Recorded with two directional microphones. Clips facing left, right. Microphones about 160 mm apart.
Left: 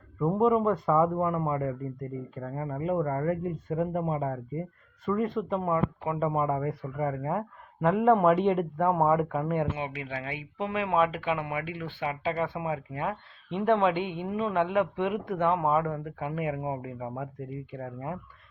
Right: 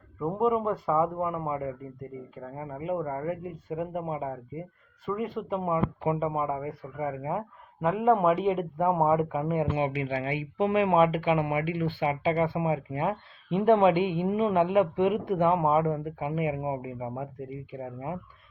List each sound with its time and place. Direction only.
0.2 s speech: centre (ahead or behind)
9.7 s speech: 20° right (ahead or behind)